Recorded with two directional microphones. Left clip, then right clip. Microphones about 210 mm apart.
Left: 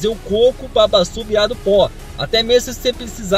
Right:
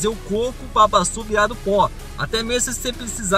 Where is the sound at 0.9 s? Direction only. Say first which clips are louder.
Left 3 dB; 15° right (ahead or behind).